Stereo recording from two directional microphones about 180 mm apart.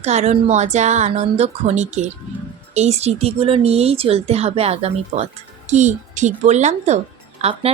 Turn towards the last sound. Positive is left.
turn(degrees=-35)  # may be behind; listen again after turning